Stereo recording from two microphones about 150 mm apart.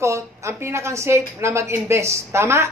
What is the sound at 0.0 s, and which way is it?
A woman's voice, 20° right (ahead or behind).